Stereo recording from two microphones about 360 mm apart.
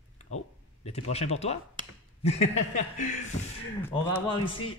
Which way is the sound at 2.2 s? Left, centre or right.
Centre.